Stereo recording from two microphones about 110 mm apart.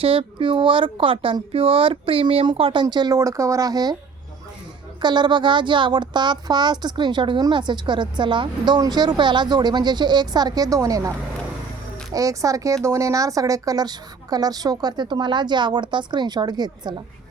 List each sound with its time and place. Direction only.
0.0 s speech: 55° right (ahead or behind)
2.8 s speech: 35° right (ahead or behind)
5.0 s speech: 45° right (ahead or behind)
12.1 s speech: 30° right (ahead or behind)